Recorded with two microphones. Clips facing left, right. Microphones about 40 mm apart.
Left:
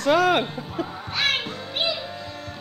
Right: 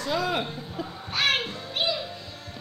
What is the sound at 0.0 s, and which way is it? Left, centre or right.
Speech, left.